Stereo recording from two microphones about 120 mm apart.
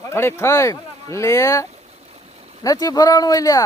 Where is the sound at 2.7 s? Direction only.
30° left (ahead or behind).